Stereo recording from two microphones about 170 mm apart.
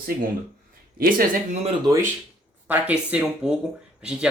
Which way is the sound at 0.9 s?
55° right (ahead or behind).